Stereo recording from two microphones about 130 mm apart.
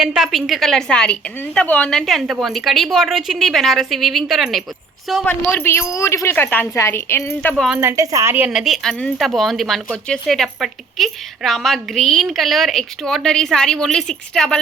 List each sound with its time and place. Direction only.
0.0 s speech: 5° right (ahead or behind)
5.2 s a woman's voice: 15° left (ahead or behind)
7.5 s speech: centre (ahead or behind)
7.8 s a woman's voice: 20° right (ahead or behind)
8.4 s speech: 5° right (ahead or behind)